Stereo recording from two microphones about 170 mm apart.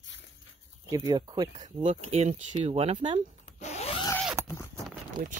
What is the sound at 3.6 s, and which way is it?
Zipper, 40° left (ahead or behind).